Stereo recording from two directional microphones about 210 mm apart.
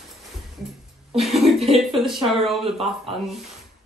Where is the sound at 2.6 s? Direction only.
25° right (ahead or behind).